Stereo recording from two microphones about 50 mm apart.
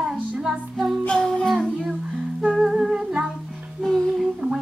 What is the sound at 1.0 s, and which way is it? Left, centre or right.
Music, centre.